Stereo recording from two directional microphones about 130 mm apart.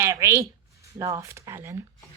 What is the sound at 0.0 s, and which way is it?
Speech, 20° right (ahead or behind).